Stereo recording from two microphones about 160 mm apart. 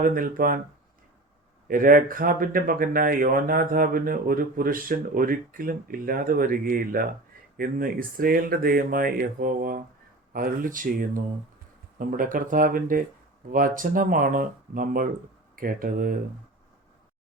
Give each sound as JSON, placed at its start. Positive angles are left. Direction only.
{"t": 0.0, "sound": "speech", "side_deg": -60}
{"t": 1.6, "sound": "speech", "side_deg": -60}